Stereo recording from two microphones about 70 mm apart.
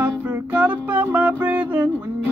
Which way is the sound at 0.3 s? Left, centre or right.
Right.